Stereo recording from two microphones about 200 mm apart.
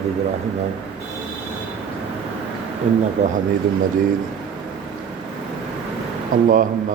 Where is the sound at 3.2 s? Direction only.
35° right (ahead or behind).